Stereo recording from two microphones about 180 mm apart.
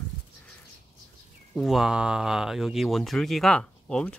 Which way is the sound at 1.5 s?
Centre (ahead or behind).